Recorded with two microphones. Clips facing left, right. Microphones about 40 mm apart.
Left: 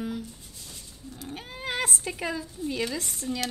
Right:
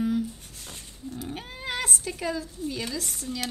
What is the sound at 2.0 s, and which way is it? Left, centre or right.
Speech, centre.